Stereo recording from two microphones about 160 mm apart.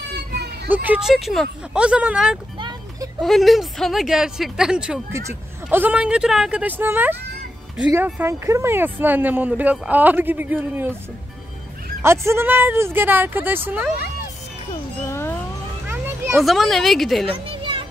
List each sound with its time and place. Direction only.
0.7 s speech: 10° right (ahead or behind)
12.0 s speech: 15° right (ahead or behind)
15.0 s a sound: 15° left (ahead or behind)
16.3 s speech: centre (ahead or behind)
17.3 s music: 35° right (ahead or behind)